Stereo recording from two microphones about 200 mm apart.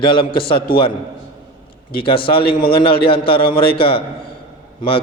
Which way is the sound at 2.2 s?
25° left (ahead or behind).